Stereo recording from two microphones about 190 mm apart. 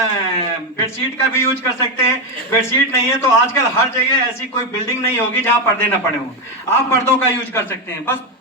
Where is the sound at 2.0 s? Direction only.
15° left (ahead or behind).